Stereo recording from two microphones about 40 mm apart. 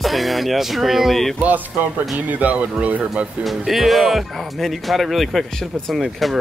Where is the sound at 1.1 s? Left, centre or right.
Centre.